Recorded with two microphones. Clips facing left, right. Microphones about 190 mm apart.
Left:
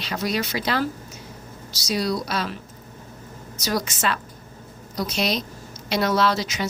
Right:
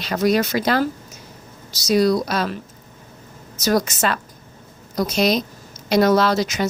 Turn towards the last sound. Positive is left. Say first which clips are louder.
# right 4 dB
turn(degrees=-45)  # may be behind; listen again after turning